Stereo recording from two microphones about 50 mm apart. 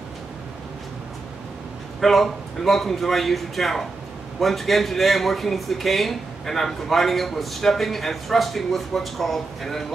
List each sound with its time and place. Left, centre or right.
2.0 s speech: centre